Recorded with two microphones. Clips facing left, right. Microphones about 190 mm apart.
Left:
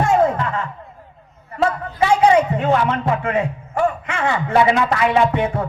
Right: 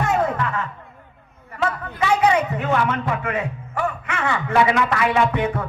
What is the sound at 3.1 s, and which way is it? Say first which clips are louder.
Speech: left 5 dB; 25° left (ahead or behind).